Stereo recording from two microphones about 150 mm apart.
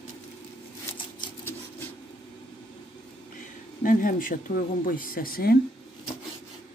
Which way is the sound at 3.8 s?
65° left (ahead or behind).